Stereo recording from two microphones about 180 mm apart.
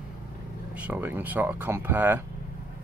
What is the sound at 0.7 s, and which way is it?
Speech, 10° right (ahead or behind).